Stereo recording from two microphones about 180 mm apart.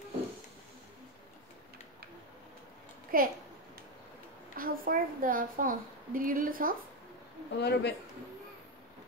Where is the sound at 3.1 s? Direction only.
50° right (ahead or behind).